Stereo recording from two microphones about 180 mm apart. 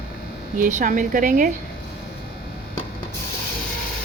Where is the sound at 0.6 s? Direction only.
45° right (ahead or behind).